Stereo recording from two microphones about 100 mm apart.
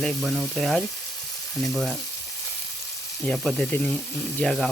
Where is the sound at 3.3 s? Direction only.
Centre (ahead or behind).